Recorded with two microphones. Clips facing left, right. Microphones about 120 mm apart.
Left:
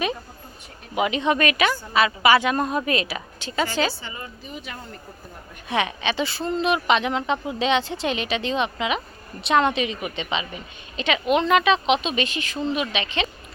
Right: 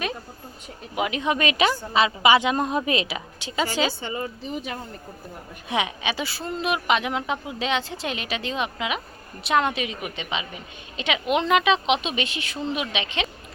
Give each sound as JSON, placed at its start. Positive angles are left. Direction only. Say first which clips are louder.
{"t": 0.9, "sound": "a woman's voice", "louder": "left 3 dB", "side_deg": 0}
{"t": 4.0, "sound": "speech", "louder": "right 7 dB", "side_deg": -35}
{"t": 5.6, "sound": "a woman's voice", "louder": "left 2 dB", "side_deg": -15}